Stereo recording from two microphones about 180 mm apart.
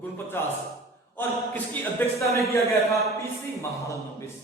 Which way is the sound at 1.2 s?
10° left (ahead or behind).